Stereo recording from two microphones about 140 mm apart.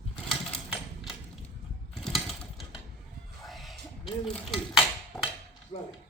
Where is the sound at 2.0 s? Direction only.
Centre (ahead or behind).